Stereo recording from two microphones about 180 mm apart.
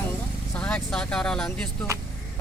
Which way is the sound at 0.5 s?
5° left (ahead or behind).